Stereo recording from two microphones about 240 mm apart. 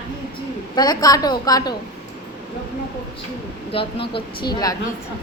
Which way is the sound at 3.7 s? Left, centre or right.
Left.